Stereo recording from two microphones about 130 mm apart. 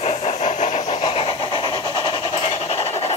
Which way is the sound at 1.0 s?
45° left (ahead or behind).